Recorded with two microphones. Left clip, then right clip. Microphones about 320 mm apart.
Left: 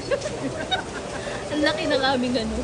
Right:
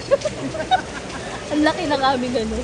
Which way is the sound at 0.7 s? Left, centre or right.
Centre.